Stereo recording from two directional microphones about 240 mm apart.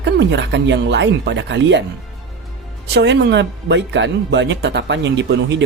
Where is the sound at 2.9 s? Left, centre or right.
Right.